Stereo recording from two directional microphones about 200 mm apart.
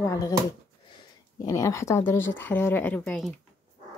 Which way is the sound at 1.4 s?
15° left (ahead or behind).